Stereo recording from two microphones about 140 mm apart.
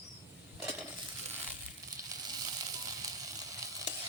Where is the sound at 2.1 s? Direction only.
25° right (ahead or behind).